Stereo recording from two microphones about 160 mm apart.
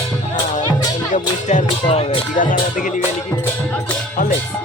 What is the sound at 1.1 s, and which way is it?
Speech, 50° left (ahead or behind).